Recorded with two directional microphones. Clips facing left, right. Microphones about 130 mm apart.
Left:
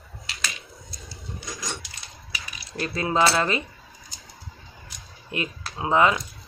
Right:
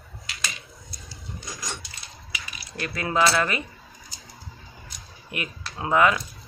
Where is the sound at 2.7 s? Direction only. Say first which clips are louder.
Left 3 dB; 25° left (ahead or behind).